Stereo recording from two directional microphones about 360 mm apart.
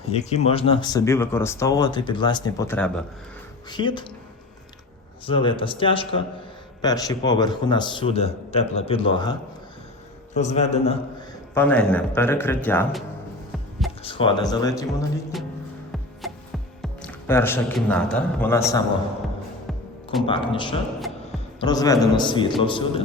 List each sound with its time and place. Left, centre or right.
0.1 s speech: centre
5.2 s speech: centre
10.3 s speech: centre
11.5 s speech: centre
14.0 s speech: centre
15.3 s music: centre
16.8 s speech: centre
20.2 s speech: centre